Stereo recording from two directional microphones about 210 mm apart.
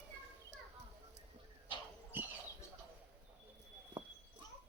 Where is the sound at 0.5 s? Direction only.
55° right (ahead or behind).